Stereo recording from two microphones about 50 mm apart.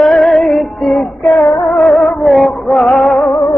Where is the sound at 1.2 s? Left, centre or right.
Left.